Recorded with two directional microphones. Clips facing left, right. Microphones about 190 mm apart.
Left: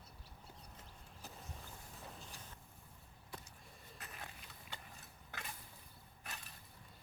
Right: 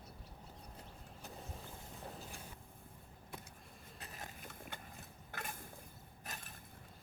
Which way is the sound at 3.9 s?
35° right (ahead or behind).